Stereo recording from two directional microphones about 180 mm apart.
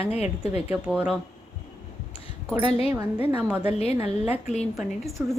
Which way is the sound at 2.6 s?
35° left (ahead or behind).